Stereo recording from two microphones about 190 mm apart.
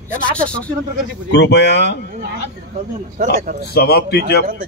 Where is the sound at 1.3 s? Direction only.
65° left (ahead or behind).